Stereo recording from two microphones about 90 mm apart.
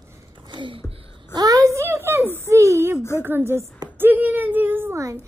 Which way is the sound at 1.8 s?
30° right (ahead or behind).